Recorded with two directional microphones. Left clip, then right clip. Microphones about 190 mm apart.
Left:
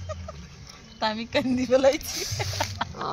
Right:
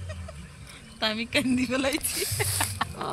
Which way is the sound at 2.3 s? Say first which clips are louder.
Even; 50° left (ahead or behind).